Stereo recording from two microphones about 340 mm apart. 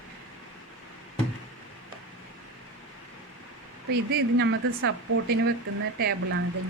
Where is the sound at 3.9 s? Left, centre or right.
Right.